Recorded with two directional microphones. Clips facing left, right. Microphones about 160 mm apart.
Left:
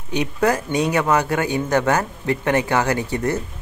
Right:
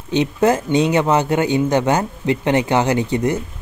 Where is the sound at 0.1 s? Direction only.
25° right (ahead or behind).